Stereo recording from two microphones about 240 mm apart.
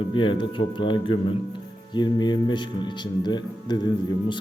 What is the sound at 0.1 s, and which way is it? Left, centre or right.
Speech, centre.